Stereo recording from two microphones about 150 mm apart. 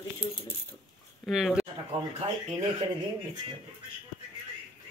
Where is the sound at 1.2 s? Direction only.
Centre (ahead or behind).